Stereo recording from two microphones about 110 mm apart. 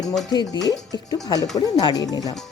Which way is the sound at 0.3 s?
40° left (ahead or behind).